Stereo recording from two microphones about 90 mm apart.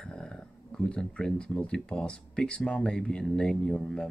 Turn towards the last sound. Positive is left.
turn(degrees=5)  # may be behind; listen again after turning